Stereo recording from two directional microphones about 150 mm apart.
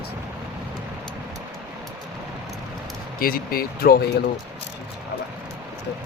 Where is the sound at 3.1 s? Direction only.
75° left (ahead or behind).